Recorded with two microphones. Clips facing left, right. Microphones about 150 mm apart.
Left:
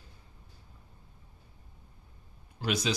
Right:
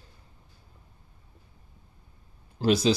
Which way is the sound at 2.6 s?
30° right (ahead or behind).